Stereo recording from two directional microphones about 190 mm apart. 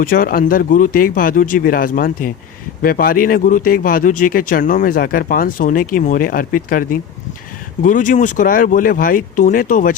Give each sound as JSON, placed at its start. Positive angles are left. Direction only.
{"t": 0.0, "sound": "speech", "side_deg": 50}